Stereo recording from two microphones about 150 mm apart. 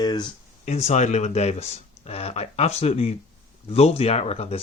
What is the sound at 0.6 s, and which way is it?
Speech, 45° left (ahead or behind).